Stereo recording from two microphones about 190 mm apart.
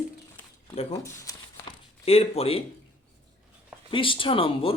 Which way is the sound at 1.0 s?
15° left (ahead or behind).